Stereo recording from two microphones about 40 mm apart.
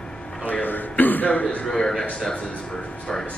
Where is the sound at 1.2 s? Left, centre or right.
Left.